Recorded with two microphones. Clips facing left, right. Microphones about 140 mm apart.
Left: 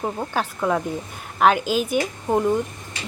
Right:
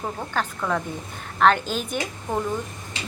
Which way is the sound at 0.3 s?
15° left (ahead or behind).